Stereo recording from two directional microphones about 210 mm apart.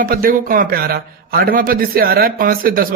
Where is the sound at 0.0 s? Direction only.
45° right (ahead or behind).